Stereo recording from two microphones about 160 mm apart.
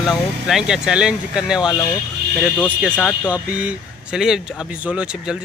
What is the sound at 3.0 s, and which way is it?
Speech, 10° right (ahead or behind).